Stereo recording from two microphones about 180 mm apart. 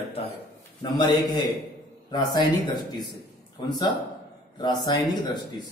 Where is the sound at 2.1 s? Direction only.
25° left (ahead or behind).